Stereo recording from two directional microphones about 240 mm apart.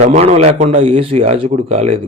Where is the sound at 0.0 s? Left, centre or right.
Right.